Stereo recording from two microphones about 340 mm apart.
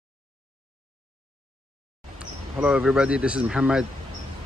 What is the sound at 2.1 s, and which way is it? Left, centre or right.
Speech, centre.